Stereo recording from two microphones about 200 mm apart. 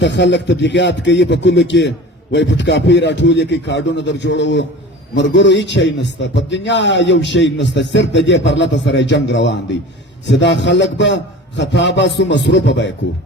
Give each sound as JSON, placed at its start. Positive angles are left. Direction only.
{"t": 0.0, "sound": "a man's voice", "side_deg": 60}